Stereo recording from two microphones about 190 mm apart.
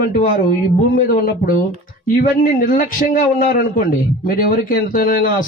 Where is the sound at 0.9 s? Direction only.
50° left (ahead or behind).